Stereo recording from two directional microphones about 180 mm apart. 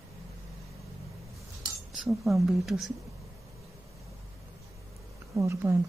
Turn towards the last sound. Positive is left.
turn(degrees=-15)  # may be behind; listen again after turning